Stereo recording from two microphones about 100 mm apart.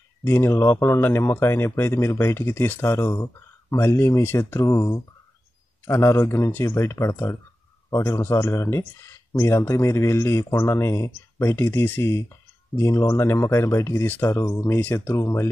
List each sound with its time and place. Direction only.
0.2 s speech: 25° left (ahead or behind)
14.4 s speech: 30° left (ahead or behind)